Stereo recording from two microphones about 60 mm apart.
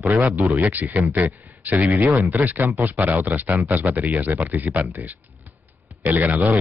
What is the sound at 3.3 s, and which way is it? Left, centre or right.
Speech, right.